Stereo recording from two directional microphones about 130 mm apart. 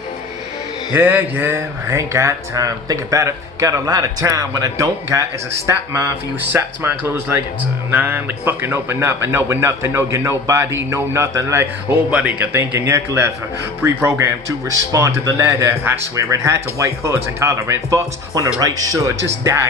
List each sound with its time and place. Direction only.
0.9 s a man's voice: 15° right (ahead or behind)
12.1 s a man's voice: 10° right (ahead or behind)